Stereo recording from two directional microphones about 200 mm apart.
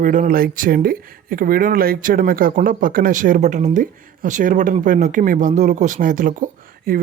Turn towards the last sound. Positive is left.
turn(degrees=-40)  # may be behind; listen again after turning